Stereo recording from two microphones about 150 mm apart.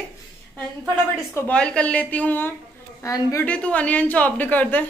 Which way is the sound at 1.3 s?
10° left (ahead or behind).